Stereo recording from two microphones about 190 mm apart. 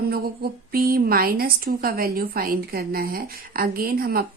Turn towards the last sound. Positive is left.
turn(degrees=-50)  # may be behind; listen again after turning